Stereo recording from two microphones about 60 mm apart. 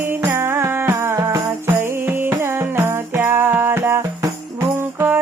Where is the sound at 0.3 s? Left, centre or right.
Right.